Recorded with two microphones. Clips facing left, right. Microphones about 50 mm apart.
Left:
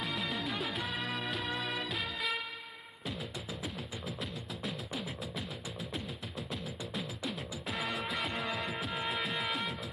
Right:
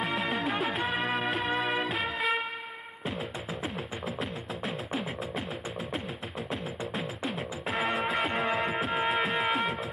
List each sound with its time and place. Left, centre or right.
0.3 s music: right
3.6 s music: right
6.5 s music: right